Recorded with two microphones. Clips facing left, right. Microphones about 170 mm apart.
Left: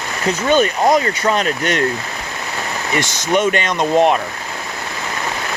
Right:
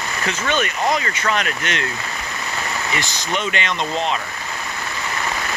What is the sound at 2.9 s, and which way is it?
Speech, 45° left (ahead or behind).